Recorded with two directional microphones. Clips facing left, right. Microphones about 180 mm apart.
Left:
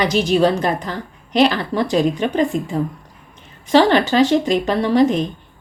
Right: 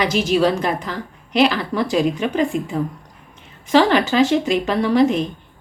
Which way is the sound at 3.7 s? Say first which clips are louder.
Left 2 dB; 35° left (ahead or behind).